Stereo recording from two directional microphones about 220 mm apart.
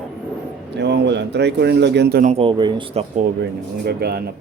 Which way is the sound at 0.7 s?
50° right (ahead or behind).